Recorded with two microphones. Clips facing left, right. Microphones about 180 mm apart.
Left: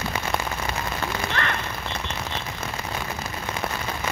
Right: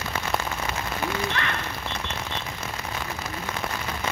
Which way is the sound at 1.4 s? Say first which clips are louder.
Left 3 dB; 50° left (ahead or behind).